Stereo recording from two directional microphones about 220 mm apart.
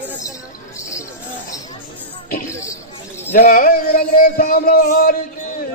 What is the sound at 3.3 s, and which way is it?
Speech, 40° left (ahead or behind).